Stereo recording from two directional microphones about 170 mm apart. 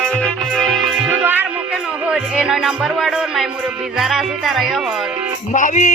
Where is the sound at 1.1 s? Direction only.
10° right (ahead or behind).